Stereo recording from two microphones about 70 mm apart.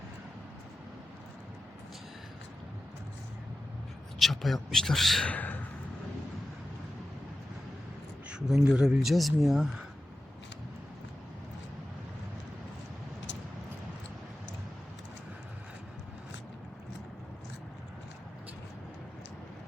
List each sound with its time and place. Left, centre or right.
4.2 s speech: centre
5.2 s speech: left
8.4 s speech: centre